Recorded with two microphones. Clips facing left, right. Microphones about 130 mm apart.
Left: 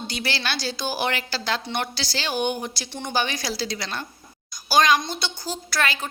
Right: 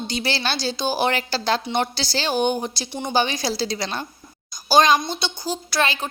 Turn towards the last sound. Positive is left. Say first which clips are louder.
# right 3 dB
turn(degrees=-25)  # may be behind; listen again after turning